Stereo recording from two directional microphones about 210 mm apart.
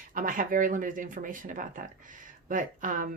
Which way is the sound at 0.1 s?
40° right (ahead or behind).